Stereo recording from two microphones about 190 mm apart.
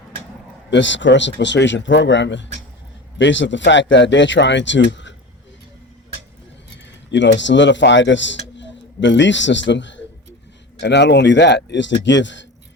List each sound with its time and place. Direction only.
0.7 s speech: 75° left (ahead or behind)
7.1 s a man's voice: 70° left (ahead or behind)